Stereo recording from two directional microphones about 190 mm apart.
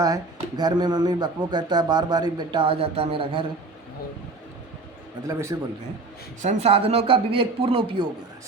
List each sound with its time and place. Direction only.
0.0 s speech: 20° right (ahead or behind)
5.3 s a man's voice: 15° right (ahead or behind)
6.4 s speech: 35° right (ahead or behind)